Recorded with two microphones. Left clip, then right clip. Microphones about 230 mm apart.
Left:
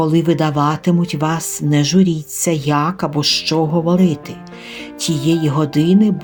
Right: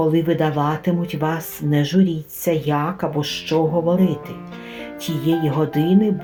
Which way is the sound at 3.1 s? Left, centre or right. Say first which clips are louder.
Left 7 dB; left.